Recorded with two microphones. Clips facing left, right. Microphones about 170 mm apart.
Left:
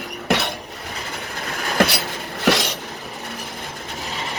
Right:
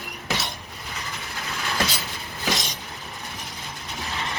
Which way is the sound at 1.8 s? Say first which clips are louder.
Left 12 dB; 70° left (ahead or behind).